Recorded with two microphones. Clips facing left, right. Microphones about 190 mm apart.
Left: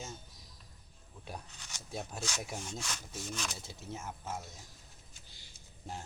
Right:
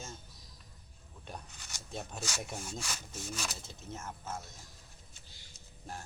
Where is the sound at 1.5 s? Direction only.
5° right (ahead or behind).